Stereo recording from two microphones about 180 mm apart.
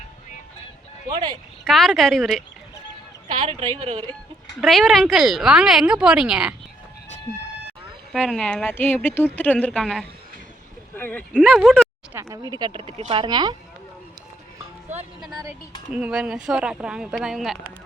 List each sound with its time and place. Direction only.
1.1 s speech: 25° right (ahead or behind)
1.6 s speech: centre (ahead or behind)
3.2 s speech: 25° right (ahead or behind)
4.6 s speech: centre (ahead or behind)
8.1 s speech: centre (ahead or behind)
12.1 s speech: 20° right (ahead or behind)
15.3 s speech: 20° right (ahead or behind)
15.9 s speech: 5° right (ahead or behind)